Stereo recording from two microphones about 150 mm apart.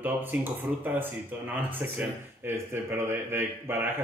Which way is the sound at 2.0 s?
15° right (ahead or behind).